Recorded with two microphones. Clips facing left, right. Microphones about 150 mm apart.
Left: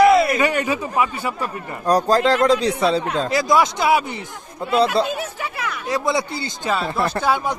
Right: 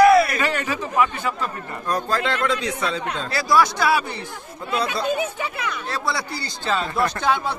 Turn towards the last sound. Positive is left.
turn(degrees=10)  # may be behind; listen again after turning